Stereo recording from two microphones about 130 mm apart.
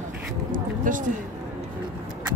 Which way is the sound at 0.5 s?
90° right.